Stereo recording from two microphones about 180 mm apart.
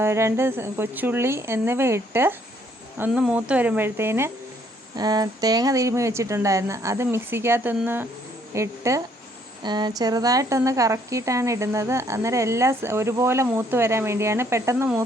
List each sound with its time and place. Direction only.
0.0 s a woman's voice: 15° right (ahead or behind)